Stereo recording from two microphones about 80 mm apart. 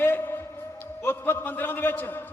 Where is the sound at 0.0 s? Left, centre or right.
Left.